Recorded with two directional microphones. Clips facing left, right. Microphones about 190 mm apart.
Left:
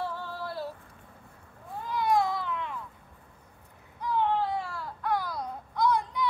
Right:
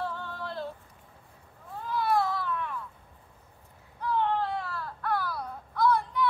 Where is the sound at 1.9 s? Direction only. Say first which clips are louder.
Left 1 dB; 15° left (ahead or behind).